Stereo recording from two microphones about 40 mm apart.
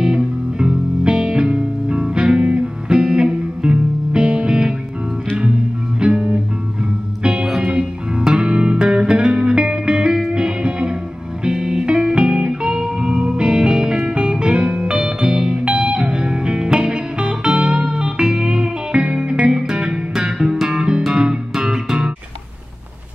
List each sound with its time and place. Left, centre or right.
0.0 s music: centre
5.9 s music: right
7.4 s music: centre
8.2 s music: centre